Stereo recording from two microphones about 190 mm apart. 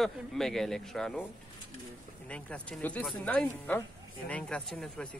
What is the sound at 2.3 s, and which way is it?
Speech, 5° left (ahead or behind).